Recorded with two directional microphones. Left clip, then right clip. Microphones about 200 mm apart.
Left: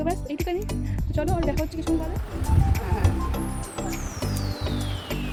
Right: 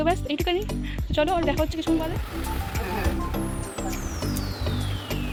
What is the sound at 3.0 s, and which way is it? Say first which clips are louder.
Music: right 1 dB; centre (ahead or behind).